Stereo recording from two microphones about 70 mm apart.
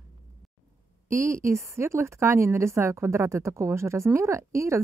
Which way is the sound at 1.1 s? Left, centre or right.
Right.